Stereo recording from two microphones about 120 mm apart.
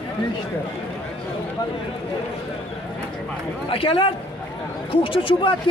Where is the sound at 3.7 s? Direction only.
50° left (ahead or behind).